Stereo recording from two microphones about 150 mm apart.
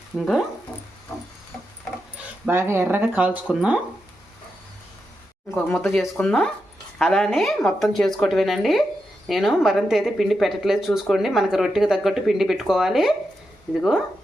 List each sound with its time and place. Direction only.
0.2 s speech: centre (ahead or behind)
0.7 s music: 15° left (ahead or behind)
2.5 s speech: 15° right (ahead or behind)
5.5 s speech: 10° left (ahead or behind)